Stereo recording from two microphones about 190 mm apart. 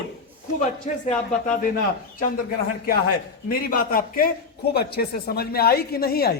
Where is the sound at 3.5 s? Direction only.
50° left (ahead or behind).